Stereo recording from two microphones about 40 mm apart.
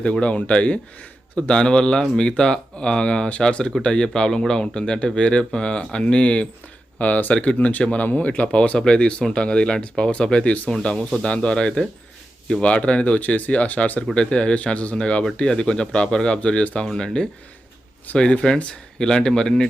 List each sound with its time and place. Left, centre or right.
0.0 s speech: left
13.1 s speech: left
14.2 s speech: left
18.2 s speech: left